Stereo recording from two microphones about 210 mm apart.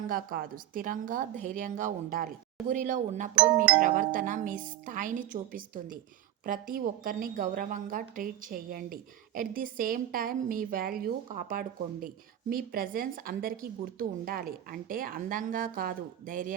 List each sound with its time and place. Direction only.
0.1 s a woman's voice: 45° right (ahead or behind)
3.3 s speech: 5° right (ahead or behind)
3.8 s a woman's voice: 40° right (ahead or behind)